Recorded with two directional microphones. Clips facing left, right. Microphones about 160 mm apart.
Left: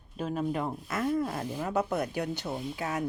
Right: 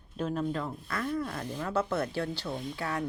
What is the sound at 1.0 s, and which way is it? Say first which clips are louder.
Speech: left 4 dB; 45° left (ahead or behind).